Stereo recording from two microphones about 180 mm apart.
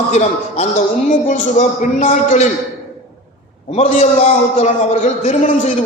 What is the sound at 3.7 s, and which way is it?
A man's voice, 40° left (ahead or behind).